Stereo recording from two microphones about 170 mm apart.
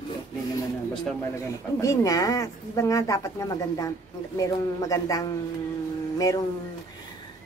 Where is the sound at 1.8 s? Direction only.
20° left (ahead or behind).